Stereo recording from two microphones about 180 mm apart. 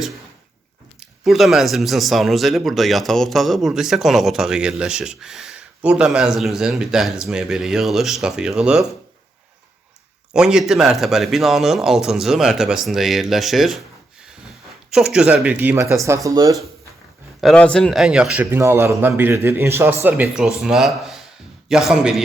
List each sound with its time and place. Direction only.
0.9 s speech: centre (ahead or behind)
10.3 s speech: 5° right (ahead or behind)
14.8 s a man's voice: 5° right (ahead or behind); by 16.6 s 20° right (ahead or behind)
17.4 s a man's voice: 5° left (ahead or behind)